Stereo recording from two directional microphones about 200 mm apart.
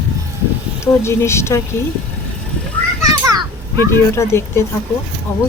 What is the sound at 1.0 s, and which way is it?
Speech, 15° left (ahead or behind).